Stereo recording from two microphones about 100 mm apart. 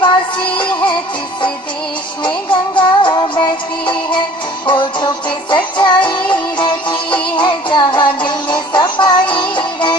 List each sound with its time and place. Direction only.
0.5 s music: 55° left (ahead or behind)
2.2 s music: 55° left (ahead or behind)